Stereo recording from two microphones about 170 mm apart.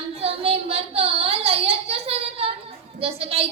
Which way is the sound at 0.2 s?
35° right (ahead or behind).